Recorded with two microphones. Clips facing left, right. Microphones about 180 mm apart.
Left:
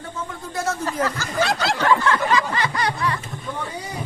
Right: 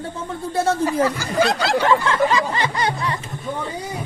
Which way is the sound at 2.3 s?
25° right (ahead or behind).